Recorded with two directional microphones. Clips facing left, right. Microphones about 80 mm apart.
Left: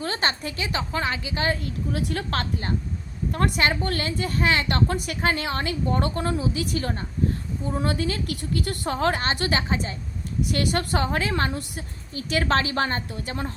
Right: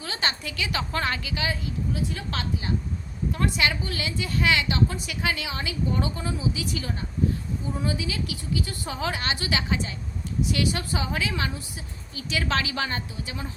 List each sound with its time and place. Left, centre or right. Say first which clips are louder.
0.0 s a woman's voice: left 4 dB; left
0.8 s a woman's voice: left 1 dB; centre
1.4 s a woman's voice: left 4 dB; left
1.9 s a woman's voice: left 5 dB; left
4.7 s a woman's voice: left 2 dB; left
5.2 s a woman's voice: left 4 dB; left
10.4 s a woman's voice: left 2 dB; left